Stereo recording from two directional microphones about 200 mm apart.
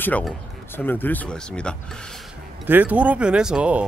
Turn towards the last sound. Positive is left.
turn(degrees=-5)  # may be behind; listen again after turning